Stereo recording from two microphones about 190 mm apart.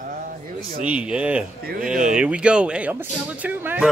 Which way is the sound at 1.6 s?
50° right (ahead or behind).